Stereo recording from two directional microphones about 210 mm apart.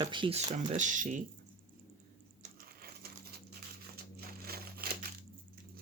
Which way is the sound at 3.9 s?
45° right (ahead or behind).